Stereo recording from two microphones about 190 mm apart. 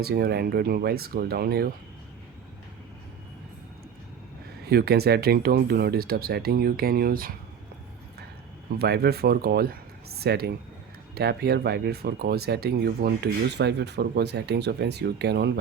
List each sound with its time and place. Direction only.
0.0 s speech: 55° right (ahead or behind)
4.6 s speech: 55° right (ahead or behind)
8.8 s speech: 55° right (ahead or behind)